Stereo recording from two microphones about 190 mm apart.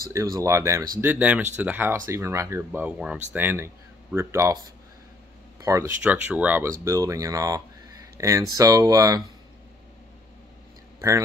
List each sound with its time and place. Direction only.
0.1 s speech: 15° right (ahead or behind)
5.6 s speech: 15° right (ahead or behind)
11.0 s speech: 15° right (ahead or behind)